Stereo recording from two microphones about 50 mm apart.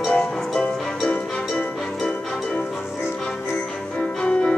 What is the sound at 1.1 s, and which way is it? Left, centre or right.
Music, left.